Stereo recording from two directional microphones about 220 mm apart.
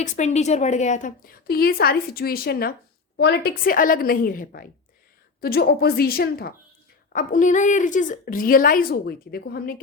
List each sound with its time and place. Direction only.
0.0 s a woman's voice: 30° left (ahead or behind)